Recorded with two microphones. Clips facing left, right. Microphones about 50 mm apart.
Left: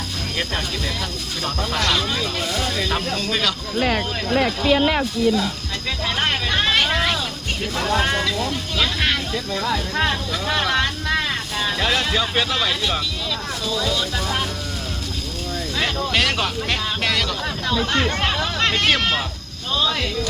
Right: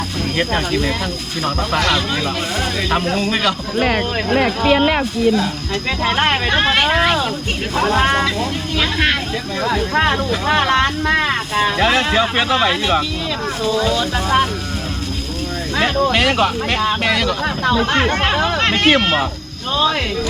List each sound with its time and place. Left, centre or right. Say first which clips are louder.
0.3 s speech: right 8 dB; right
3.1 s speech: right 5 dB; right
3.8 s speech: right 2 dB; right
4.6 s speech: right 4 dB; right
6.0 s speech: right 6 dB; right
8.8 s a sound: right 4 dB; right
9.6 s speech: right 6 dB; right
15.8 s speech: right 6 dB; right
17.4 s speech: right 6 dB; right